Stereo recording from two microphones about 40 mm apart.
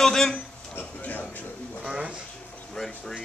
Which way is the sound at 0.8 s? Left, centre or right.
Left.